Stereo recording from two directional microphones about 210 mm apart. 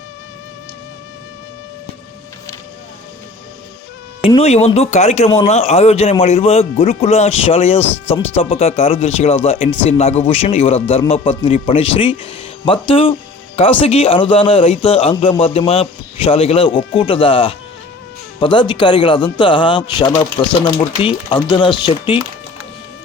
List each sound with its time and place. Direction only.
4.2 s speech: 25° left (ahead or behind)